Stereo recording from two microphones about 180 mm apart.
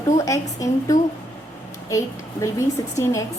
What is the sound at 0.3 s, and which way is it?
A woman's voice, 20° left (ahead or behind).